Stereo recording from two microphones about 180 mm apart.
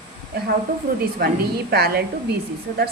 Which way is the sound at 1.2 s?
60° right (ahead or behind).